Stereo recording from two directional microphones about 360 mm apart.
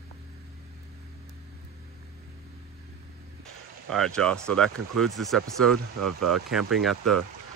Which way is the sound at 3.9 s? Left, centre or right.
Centre.